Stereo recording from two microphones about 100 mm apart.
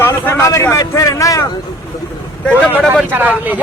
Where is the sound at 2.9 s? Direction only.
20° right (ahead or behind).